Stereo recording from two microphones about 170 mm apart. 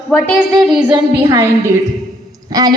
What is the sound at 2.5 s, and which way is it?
Speech, 20° right (ahead or behind).